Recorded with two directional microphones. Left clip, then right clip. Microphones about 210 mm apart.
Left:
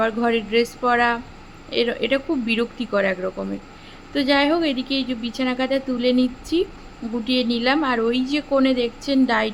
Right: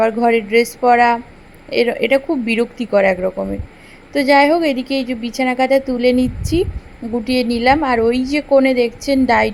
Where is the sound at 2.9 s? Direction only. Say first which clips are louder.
Right 8 dB; 15° right (ahead or behind).